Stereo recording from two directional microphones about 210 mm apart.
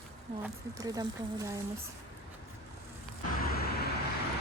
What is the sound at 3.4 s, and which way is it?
Vehicle, 50° left (ahead or behind).